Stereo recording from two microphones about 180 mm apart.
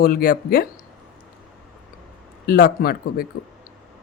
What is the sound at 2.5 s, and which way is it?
Speech, 55° left (ahead or behind).